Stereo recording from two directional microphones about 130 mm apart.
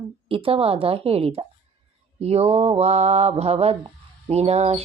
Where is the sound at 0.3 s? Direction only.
45° right (ahead or behind).